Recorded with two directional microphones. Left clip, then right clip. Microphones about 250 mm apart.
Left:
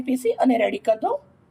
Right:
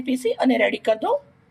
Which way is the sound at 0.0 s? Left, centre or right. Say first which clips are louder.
Left 1 dB; centre.